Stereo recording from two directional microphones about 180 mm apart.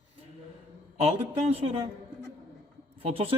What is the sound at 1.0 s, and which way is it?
Speech, 35° right (ahead or behind).